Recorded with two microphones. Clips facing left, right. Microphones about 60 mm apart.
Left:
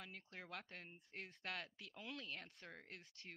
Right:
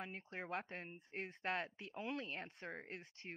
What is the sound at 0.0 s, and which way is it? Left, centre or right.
Speech, right.